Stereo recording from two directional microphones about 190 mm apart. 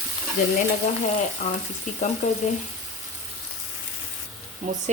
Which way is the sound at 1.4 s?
35° left (ahead or behind).